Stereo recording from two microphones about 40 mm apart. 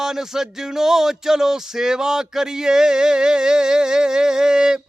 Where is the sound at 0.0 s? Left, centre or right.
Centre.